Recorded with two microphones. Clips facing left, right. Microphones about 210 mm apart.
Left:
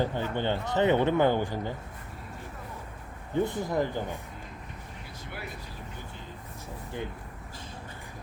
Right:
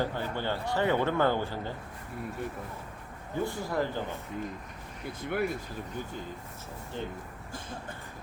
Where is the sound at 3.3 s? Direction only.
20° left (ahead or behind).